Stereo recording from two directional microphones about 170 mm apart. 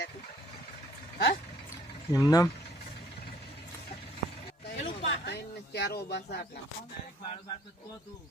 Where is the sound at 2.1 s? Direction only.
20° left (ahead or behind).